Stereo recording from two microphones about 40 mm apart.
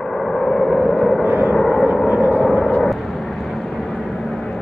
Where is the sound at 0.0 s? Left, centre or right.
Centre.